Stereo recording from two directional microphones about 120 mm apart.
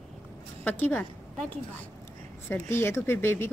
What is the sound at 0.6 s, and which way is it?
Speech, 15° left (ahead or behind).